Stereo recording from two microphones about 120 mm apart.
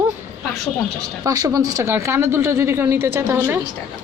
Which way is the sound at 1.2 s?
30° right (ahead or behind).